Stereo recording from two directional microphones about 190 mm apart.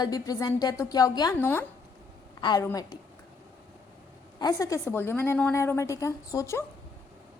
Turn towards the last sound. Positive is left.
turn(degrees=15)  # may be behind; listen again after turning